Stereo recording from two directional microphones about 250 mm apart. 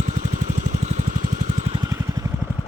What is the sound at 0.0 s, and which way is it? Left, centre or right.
Vehicle, right.